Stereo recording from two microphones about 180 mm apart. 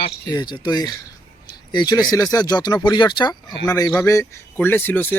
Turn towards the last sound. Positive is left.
turn(degrees=10)  # may be behind; listen again after turning